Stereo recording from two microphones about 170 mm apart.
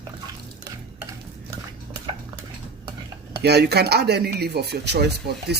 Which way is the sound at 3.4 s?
75° right (ahead or behind).